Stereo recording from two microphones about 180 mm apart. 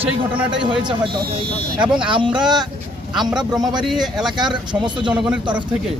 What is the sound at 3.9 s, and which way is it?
Speech, centre (ahead or behind).